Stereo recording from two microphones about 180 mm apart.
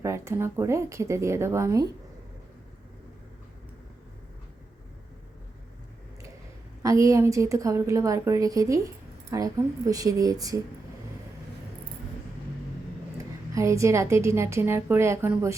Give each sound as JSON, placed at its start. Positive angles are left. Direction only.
{"t": 0.0, "sound": "a woman's voice", "side_deg": -15}
{"t": 6.8, "sound": "a woman's voice", "side_deg": -15}
{"t": 13.5, "sound": "a woman's voice", "side_deg": -15}